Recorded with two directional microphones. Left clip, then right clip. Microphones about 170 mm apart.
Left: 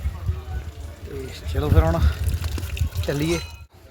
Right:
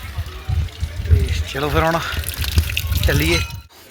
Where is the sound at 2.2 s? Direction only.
45° left (ahead or behind).